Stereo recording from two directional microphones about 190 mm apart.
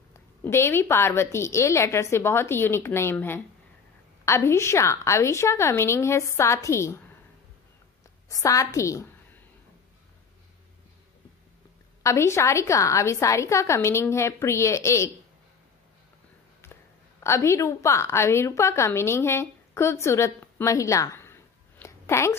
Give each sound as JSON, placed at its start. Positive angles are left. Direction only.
{"t": 0.1, "sound": "a woman's voice", "side_deg": 15}
{"t": 8.3, "sound": "a woman's voice", "side_deg": 15}
{"t": 12.0, "sound": "a woman's voice", "side_deg": 15}
{"t": 16.6, "sound": "a sound", "side_deg": 15}
{"t": 17.2, "sound": "a woman's voice", "side_deg": 15}